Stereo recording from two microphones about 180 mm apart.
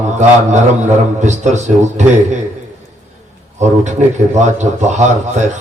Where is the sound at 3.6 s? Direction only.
40° right (ahead or behind).